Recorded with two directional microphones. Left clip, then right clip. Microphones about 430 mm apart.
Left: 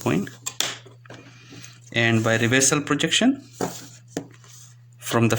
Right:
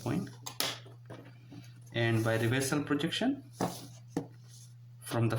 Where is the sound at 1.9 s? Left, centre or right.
Right.